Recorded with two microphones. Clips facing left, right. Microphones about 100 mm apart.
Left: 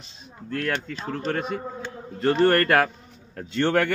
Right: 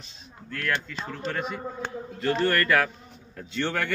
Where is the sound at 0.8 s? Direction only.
45° left (ahead or behind).